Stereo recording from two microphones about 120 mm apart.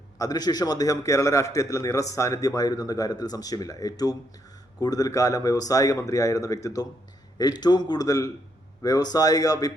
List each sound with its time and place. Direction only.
0.2 s a man's voice: 30° left (ahead or behind)